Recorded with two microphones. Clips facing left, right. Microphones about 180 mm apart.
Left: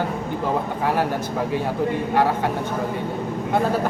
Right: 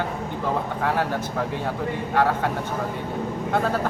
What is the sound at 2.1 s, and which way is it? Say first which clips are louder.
Mantra: even; 15° left (ahead or behind).